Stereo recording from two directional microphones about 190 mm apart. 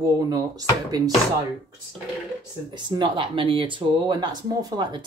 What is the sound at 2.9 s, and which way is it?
Speech, 25° right (ahead or behind).